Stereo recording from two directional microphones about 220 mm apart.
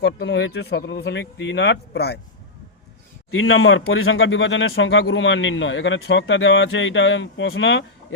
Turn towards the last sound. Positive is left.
turn(degrees=60)  # may be behind; listen again after turning